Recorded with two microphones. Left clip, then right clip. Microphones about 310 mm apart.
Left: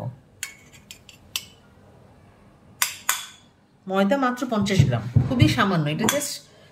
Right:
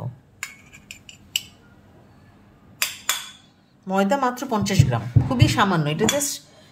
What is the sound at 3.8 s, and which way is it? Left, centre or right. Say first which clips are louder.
A woman's voice: right 1 dB; centre.